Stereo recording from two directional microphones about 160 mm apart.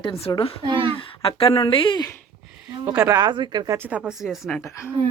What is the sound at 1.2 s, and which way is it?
Speech, 35° left (ahead or behind).